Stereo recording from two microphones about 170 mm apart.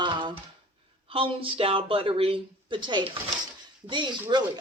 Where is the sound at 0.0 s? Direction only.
30° right (ahead or behind).